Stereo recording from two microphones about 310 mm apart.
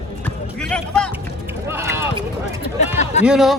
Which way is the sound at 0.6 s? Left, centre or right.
Centre.